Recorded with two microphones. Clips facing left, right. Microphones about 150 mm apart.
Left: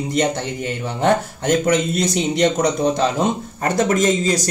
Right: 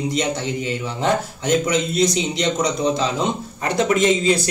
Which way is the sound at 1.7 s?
50° left (ahead or behind).